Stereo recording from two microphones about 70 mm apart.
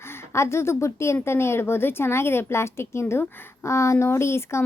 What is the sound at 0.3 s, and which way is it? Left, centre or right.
A woman's voice, left.